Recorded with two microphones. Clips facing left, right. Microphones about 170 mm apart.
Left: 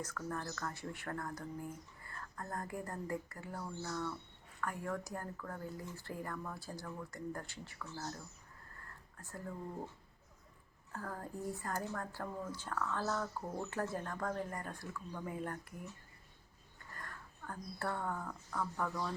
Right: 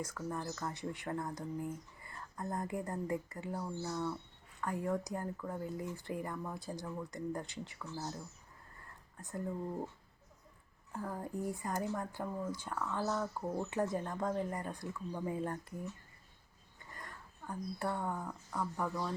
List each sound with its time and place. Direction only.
0.0 s speech: 10° right (ahead or behind)
10.9 s speech: 15° right (ahead or behind)
16.9 s speech: 20° right (ahead or behind)